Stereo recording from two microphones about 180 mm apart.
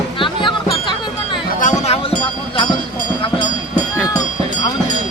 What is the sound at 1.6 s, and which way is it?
Speech, 40° left (ahead or behind).